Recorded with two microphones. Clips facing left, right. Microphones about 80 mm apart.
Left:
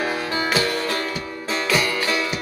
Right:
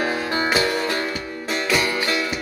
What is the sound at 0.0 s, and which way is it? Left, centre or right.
Music, centre.